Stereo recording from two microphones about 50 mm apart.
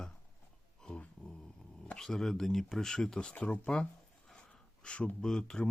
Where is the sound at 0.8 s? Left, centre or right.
Centre.